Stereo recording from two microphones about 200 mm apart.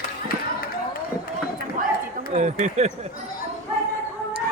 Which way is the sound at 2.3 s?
35° right (ahead or behind).